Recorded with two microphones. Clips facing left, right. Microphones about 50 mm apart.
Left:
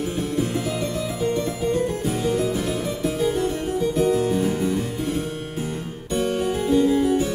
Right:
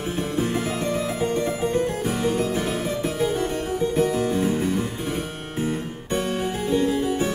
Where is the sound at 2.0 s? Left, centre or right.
Right.